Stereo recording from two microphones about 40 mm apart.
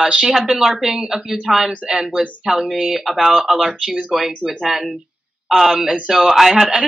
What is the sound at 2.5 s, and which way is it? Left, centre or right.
Speech, centre.